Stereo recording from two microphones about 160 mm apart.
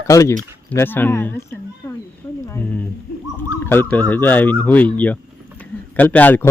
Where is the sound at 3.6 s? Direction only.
15° left (ahead or behind).